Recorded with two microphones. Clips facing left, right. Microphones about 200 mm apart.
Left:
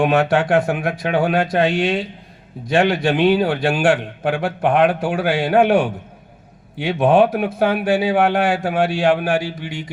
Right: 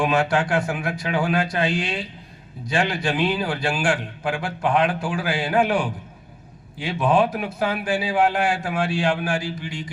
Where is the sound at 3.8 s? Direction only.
60° left (ahead or behind).